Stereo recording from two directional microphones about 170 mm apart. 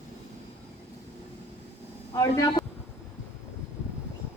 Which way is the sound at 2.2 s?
20° left (ahead or behind).